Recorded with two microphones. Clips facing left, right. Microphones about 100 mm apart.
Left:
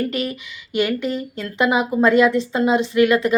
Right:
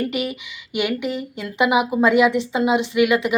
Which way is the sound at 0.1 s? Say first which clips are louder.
Even; 15° right (ahead or behind).